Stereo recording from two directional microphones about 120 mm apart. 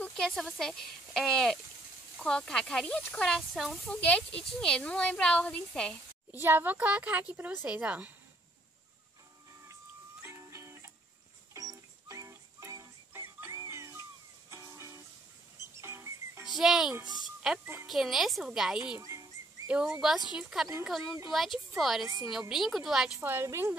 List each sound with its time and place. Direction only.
0.1 s speech: 5° left (ahead or behind)
6.4 s a woman's voice: 15° right (ahead or behind)
10.2 s music: 20° right (ahead or behind)
16.4 s a child's voice: 5° right (ahead or behind)
17.2 s music: 5° right (ahead or behind)
17.8 s speech: centre (ahead or behind)
18.9 s a sound: 30° right (ahead or behind)
20.0 s speech: 5° right (ahead or behind)
23.2 s a woman's voice: 20° right (ahead or behind)